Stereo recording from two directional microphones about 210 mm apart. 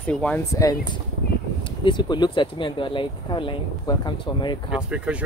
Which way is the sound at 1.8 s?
20° left (ahead or behind).